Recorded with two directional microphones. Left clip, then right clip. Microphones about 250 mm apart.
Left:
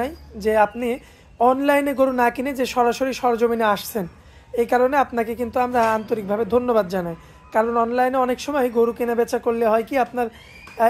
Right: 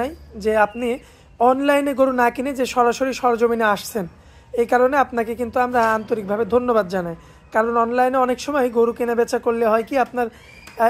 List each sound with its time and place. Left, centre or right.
0.0 s a woman's voice: centre